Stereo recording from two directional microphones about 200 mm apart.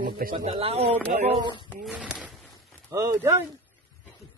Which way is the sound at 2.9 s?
15° right (ahead or behind).